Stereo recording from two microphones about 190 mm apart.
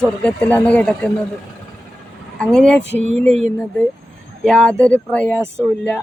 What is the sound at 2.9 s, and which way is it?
Speech, 35° right (ahead or behind).